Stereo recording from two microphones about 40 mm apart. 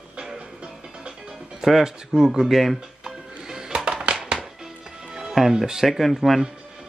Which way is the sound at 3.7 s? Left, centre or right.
Right.